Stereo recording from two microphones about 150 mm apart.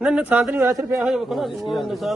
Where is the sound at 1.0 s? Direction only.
5° right (ahead or behind).